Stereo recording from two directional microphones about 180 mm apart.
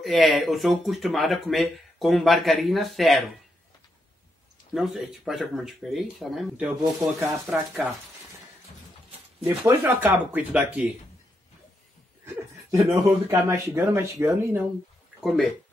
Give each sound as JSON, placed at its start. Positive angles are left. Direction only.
{"t": 0.0, "sound": "speech", "side_deg": 0}
{"t": 4.7, "sound": "speech", "side_deg": 0}
{"t": 6.8, "sound": "speech", "side_deg": -15}
{"t": 7.5, "sound": "speech", "side_deg": 0}
{"t": 9.4, "sound": "speech", "side_deg": -10}
{"t": 13.0, "sound": "speech", "side_deg": -15}
{"t": 15.1, "sound": "speech", "side_deg": 0}